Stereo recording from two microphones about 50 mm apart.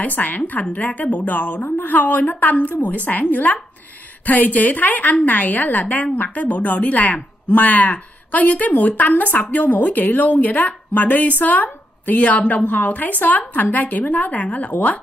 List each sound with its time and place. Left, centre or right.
0.0 s a woman's voice: left